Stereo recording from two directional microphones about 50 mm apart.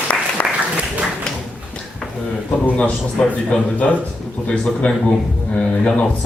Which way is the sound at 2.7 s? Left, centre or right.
Left.